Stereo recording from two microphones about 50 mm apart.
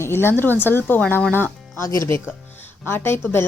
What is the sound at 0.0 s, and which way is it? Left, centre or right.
Speech, left.